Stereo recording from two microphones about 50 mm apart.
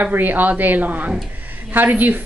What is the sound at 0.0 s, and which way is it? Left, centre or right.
A woman's voice, right.